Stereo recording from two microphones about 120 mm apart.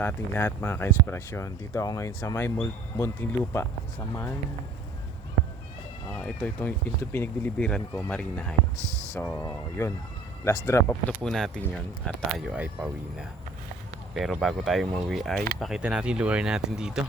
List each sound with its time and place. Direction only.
0.0 s speech: 15° left (ahead or behind)
6.1 s speech: 10° left (ahead or behind)
8.8 s speech: 25° right (ahead or behind)
9.1 s speech: 15° left (ahead or behind)
9.4 s speech: 25° left (ahead or behind)
11.2 s speech: 5° left (ahead or behind)
12.4 s speech: 10° right (ahead or behind)